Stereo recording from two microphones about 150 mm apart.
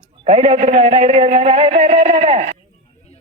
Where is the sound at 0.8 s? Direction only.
40° right (ahead or behind).